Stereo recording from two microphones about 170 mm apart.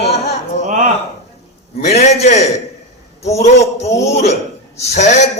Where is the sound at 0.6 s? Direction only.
45° right (ahead or behind).